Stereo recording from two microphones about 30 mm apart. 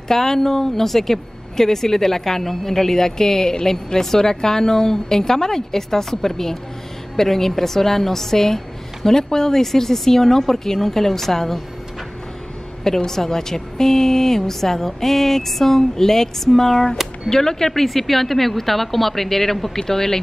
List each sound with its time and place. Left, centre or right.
0.1 s a woman's voice: centre
12.8 s a woman's voice: centre
17.8 s a woman's voice: centre